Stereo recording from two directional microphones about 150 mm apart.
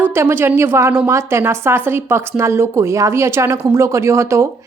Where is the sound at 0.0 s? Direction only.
15° right (ahead or behind).